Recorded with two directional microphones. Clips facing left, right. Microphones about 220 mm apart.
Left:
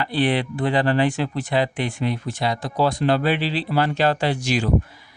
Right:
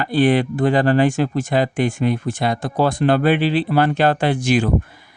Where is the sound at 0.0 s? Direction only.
45° right (ahead or behind).